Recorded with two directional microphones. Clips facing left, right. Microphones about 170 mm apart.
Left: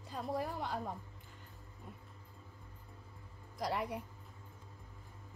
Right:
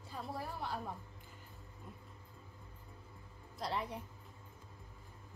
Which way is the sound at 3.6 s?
10° left (ahead or behind).